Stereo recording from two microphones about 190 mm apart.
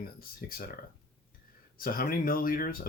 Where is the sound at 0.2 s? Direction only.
50° left (ahead or behind).